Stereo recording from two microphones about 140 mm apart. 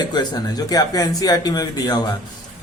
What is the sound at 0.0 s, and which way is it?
Speech, 30° left (ahead or behind).